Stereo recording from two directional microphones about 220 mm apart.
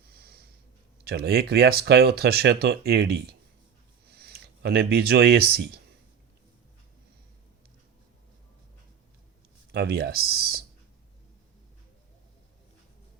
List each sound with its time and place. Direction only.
0.1 s snort: 45° right (ahead or behind)
1.0 s speech: 45° right (ahead or behind)
9.7 s speech: 45° right (ahead or behind)